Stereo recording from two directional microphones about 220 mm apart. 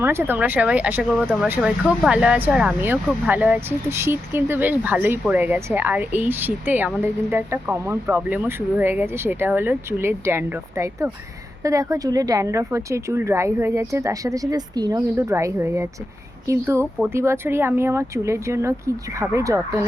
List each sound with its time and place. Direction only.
0.0 s speech: 10° right (ahead or behind)